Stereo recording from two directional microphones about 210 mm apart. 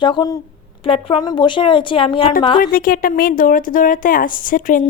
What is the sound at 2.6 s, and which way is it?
A woman's voice, 40° left (ahead or behind).